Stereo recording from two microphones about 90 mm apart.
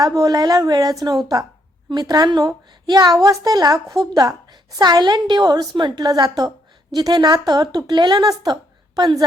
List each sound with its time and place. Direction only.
0.0 s a woman's voice: 40° right (ahead or behind)